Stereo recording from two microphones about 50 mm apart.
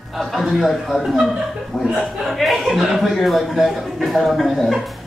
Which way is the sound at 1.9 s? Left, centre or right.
Centre.